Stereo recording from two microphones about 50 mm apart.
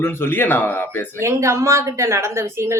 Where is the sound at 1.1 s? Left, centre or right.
Right.